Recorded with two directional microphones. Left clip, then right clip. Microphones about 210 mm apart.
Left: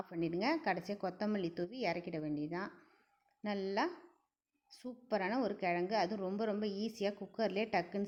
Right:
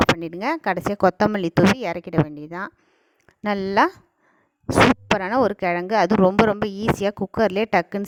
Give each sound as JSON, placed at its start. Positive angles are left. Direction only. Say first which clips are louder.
{"t": 0.2, "sound": "speech", "louder": "right 10 dB", "side_deg": -50}
{"t": 5.1, "sound": "speech", "louder": "right 16 dB", "side_deg": -50}